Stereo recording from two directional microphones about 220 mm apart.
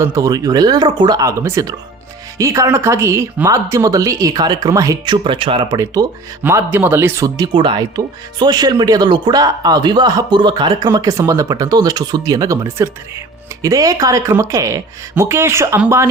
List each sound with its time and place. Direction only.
0.0 s speech: 15° right (ahead or behind)